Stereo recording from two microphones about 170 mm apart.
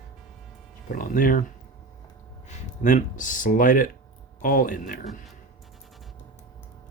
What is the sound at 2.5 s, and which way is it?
Speech, 50° left (ahead or behind).